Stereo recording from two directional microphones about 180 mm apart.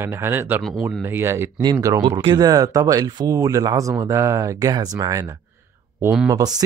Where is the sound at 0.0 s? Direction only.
15° right (ahead or behind).